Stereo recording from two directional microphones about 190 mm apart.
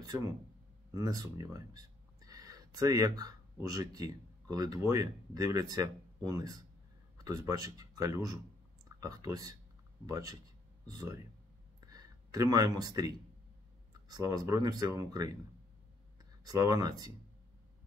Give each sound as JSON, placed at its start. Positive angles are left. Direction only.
{"t": 0.9, "sound": "speech", "side_deg": -15}
{"t": 11.8, "sound": "a sound", "side_deg": -20}
{"t": 14.0, "sound": "speech", "side_deg": -20}
{"t": 16.4, "sound": "speech", "side_deg": -20}